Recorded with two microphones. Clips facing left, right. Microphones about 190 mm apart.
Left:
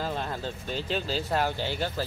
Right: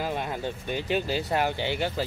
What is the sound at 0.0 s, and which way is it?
Speech, 15° right (ahead or behind).